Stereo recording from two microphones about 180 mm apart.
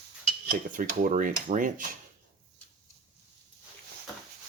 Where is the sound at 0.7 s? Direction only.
50° right (ahead or behind).